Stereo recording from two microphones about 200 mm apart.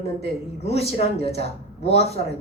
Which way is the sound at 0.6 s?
30° left (ahead or behind).